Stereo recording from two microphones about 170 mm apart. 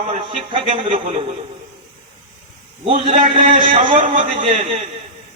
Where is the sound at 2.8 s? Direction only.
35° right (ahead or behind).